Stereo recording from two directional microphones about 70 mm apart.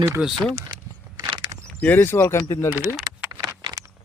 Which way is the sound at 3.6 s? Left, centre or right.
Right.